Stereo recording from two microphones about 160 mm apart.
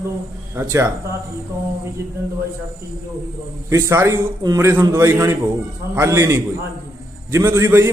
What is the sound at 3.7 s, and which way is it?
A man's voice, 15° right (ahead or behind).